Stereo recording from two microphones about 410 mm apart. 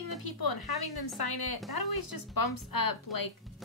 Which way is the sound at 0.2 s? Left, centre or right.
Left.